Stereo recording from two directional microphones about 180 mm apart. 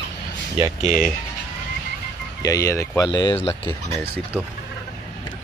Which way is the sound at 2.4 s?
20° left (ahead or behind).